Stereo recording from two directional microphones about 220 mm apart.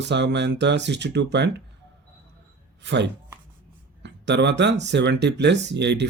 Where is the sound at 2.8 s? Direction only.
55° right (ahead or behind).